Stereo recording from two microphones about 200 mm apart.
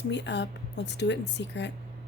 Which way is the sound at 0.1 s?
60° left (ahead or behind).